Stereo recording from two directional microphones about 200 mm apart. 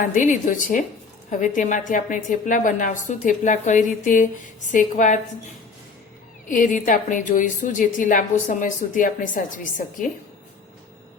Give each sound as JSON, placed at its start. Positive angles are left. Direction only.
{"t": 0.0, "sound": "a woman's voice", "side_deg": 40}
{"t": 6.5, "sound": "a woman's voice", "side_deg": 40}